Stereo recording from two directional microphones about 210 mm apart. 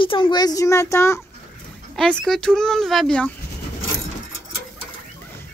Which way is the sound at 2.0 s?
Centre (ahead or behind).